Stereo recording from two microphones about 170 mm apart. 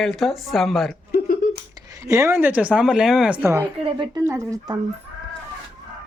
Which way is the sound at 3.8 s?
30° right (ahead or behind).